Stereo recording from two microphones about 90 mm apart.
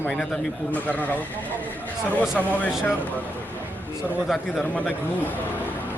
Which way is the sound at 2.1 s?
15° left (ahead or behind).